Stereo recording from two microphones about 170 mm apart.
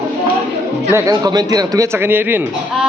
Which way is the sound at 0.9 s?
20° right (ahead or behind).